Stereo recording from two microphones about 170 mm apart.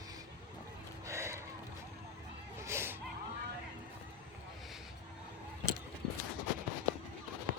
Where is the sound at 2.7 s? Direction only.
15° right (ahead or behind).